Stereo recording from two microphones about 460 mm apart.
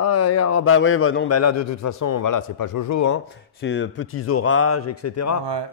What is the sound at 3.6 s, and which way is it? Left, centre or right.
Speech, left.